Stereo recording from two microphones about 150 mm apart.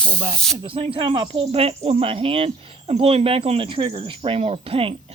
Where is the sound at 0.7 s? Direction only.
35° right (ahead or behind).